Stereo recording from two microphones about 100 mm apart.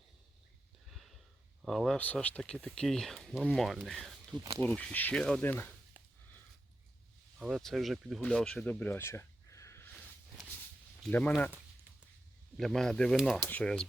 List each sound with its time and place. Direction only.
0.9 s a sound: centre (ahead or behind)
1.6 s speech: centre (ahead or behind)
2.1 s speech: 10° left (ahead or behind)
5.4 s speech: 20° left (ahead or behind)
7.3 s speech: 5° right (ahead or behind)
8.8 s a sound: 20° left (ahead or behind)
11.1 s speech: 10° left (ahead or behind)
12.5 s speech: 5° left (ahead or behind)